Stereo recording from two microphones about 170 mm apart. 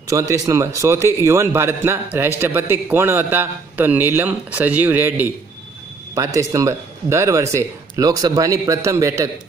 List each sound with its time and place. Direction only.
0.1 s a man's voice: 20° right (ahead or behind)